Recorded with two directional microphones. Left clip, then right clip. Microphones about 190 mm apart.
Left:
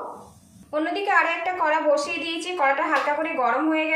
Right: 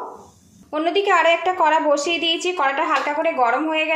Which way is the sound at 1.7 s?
50° right (ahead or behind).